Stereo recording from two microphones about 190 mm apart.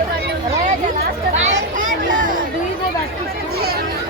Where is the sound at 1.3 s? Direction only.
35° right (ahead or behind).